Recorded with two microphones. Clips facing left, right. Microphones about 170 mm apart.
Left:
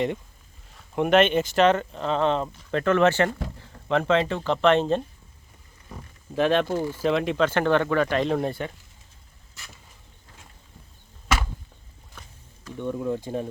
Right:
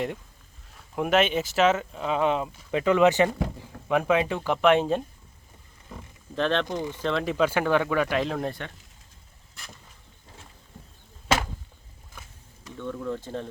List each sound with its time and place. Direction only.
0.7 s speech: centre (ahead or behind)
6.3 s speech: 10° left (ahead or behind)
7.3 s speech: 10° right (ahead or behind)
12.7 s speech: 20° left (ahead or behind)